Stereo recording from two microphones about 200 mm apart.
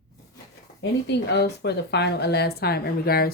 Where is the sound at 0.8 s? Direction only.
60° left (ahead or behind).